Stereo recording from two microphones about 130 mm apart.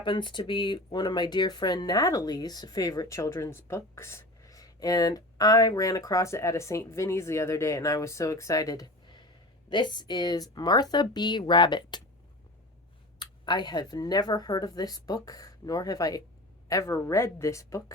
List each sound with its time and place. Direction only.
0.0 s speech: 40° left (ahead or behind)
13.1 s speech: 35° left (ahead or behind)